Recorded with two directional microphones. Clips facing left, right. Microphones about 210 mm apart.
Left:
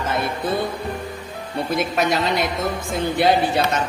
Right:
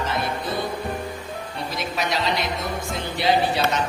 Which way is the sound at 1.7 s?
50° left (ahead or behind).